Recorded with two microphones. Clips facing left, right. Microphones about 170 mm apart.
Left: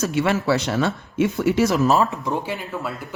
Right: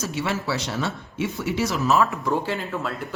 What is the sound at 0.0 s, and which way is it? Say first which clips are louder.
Speech: left 6 dB; 55° left (ahead or behind).